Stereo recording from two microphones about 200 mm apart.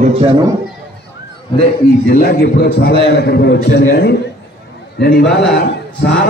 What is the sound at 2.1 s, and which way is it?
A man's voice, 50° left (ahead or behind).